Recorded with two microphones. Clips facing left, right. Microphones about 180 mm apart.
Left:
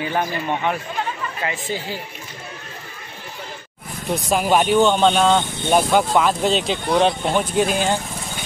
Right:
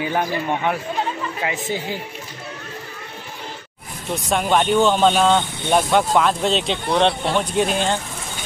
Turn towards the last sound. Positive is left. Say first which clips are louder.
# left 1 dB
turn(degrees=5)  # may be behind; listen again after turning